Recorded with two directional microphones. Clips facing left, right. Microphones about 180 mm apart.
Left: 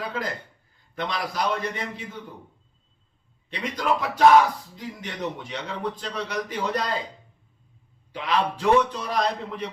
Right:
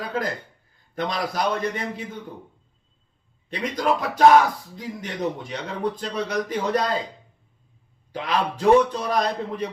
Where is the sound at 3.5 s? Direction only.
40° right (ahead or behind).